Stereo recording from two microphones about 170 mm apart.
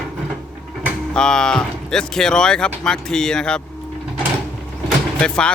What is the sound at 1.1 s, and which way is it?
Speech, 5° left (ahead or behind).